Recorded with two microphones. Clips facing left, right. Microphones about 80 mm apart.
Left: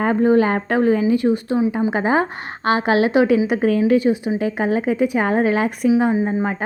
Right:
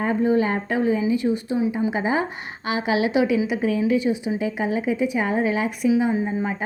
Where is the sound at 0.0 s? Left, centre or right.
Left.